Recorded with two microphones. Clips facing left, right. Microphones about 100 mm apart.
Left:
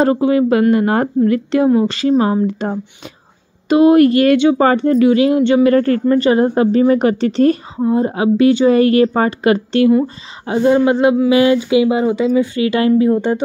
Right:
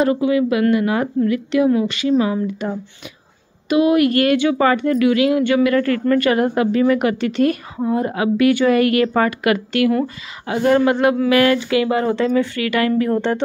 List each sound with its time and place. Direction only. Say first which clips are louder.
0.0 s a woman's voice: left 3 dB; 35° left (ahead or behind)
11.1 s a sound: left 3 dB; 20° left (ahead or behind)
12.5 s a woman's voice: left 5 dB; 25° left (ahead or behind)